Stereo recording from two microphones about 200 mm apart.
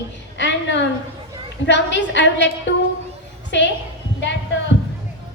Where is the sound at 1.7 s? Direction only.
65° left (ahead or behind).